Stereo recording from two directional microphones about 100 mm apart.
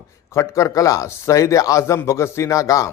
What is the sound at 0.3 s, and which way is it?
Speech, 30° left (ahead or behind).